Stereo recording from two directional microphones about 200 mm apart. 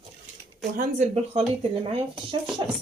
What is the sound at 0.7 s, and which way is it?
Speech, 35° right (ahead or behind).